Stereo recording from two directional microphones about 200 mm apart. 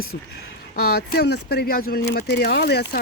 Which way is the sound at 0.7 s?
50° left (ahead or behind).